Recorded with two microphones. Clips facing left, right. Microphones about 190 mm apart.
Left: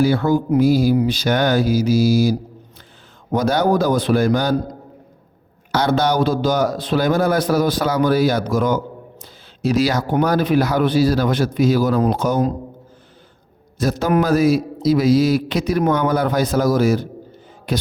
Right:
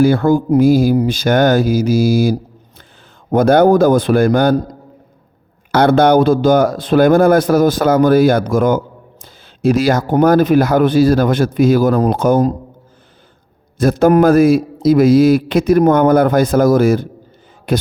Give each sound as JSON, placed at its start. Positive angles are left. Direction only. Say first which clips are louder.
{"t": 0.0, "sound": "speech", "louder": "right 5 dB", "side_deg": -50}
{"t": 13.7, "sound": "a man's voice", "louder": "right 7 dB", "side_deg": -50}